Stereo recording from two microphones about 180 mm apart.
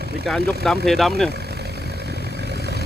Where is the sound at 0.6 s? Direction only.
Centre (ahead or behind).